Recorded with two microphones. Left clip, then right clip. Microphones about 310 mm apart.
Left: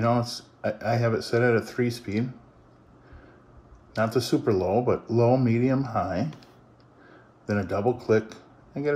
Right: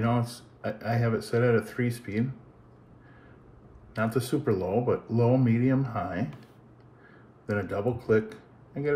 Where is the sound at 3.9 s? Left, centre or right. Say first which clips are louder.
Left 4 dB; left.